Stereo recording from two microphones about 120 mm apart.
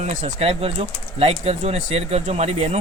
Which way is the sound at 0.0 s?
90° right.